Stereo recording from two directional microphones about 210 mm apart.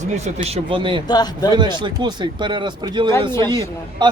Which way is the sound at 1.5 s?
20° right (ahead or behind).